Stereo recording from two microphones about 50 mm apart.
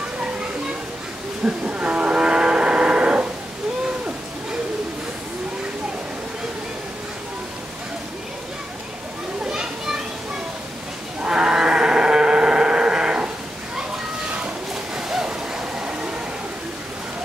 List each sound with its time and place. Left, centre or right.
1.4 s music: right
9.5 s children playing: centre
11.2 s sheep: centre
14.7 s a sound: centre